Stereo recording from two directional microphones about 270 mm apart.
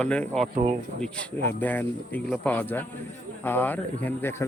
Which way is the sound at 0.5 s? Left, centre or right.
Right.